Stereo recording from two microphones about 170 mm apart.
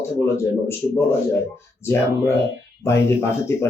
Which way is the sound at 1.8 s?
15° left (ahead or behind).